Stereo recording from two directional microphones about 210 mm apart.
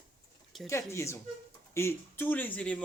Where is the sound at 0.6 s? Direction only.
15° left (ahead or behind).